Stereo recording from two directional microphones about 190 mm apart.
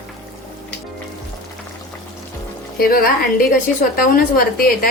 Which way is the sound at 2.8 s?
50° left (ahead or behind).